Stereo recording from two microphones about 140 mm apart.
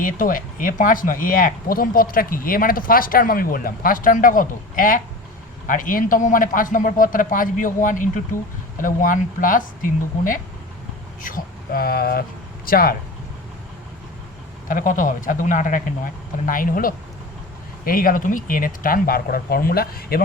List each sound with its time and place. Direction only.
0.0 s a man's voice: 80° left
14.7 s a man's voice: 70° left (ahead or behind)
17.8 s speech: 90° left